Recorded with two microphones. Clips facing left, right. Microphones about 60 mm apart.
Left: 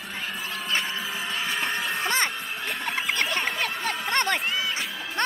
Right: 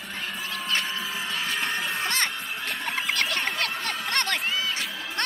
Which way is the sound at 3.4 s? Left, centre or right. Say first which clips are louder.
Left 1 dB; centre.